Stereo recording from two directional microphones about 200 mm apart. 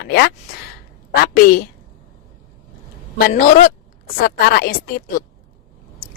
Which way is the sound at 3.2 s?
45° left (ahead or behind).